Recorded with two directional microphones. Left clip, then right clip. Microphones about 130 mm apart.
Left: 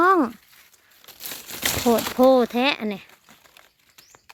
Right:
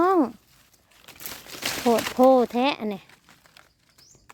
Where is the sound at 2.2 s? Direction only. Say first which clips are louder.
Left 1 dB; 5° right (ahead or behind).